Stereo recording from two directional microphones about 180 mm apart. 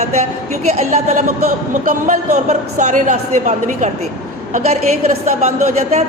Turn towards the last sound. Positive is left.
turn(degrees=-40)  # may be behind; listen again after turning